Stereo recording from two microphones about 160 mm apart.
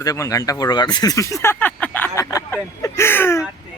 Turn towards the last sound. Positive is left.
turn(degrees=15)  # may be behind; listen again after turning